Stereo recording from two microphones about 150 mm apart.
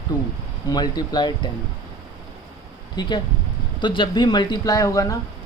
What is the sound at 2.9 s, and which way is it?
Speech, 30° left (ahead or behind).